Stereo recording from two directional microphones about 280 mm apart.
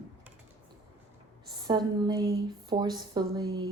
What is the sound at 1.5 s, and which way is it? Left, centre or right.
Speech, centre.